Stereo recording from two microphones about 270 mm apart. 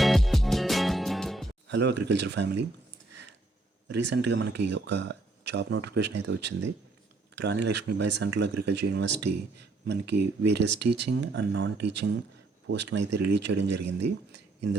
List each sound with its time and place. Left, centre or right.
0.0 s music: centre
1.6 s speech: right
3.8 s speech: right
14.3 s a sound: right